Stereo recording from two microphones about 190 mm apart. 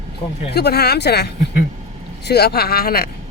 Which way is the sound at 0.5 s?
55° left (ahead or behind).